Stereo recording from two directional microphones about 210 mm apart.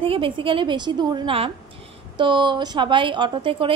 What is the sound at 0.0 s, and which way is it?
A woman's voice, 25° right (ahead or behind).